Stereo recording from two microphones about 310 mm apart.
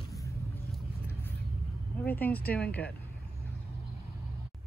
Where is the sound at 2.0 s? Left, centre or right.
Centre.